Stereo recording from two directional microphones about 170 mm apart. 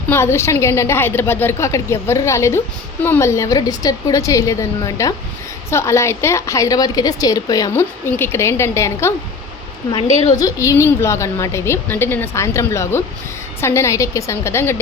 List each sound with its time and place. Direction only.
0.1 s a woman's voice: 15° left (ahead or behind)
10.3 s a woman's voice: 20° left (ahead or behind)